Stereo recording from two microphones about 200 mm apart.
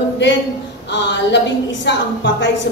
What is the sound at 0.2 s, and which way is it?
Speech, 60° left (ahead or behind).